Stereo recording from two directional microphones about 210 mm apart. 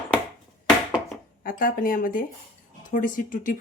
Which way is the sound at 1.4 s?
40° left (ahead or behind).